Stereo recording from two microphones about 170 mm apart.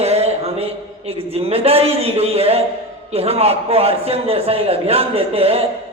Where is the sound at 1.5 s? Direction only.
35° right (ahead or behind).